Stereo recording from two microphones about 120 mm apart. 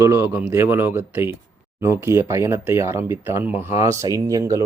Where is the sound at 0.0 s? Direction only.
25° right (ahead or behind).